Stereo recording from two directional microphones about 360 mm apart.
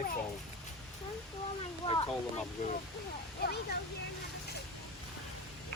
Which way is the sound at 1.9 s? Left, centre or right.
Centre.